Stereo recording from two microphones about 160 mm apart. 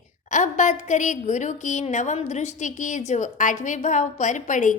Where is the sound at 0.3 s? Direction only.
50° left (ahead or behind).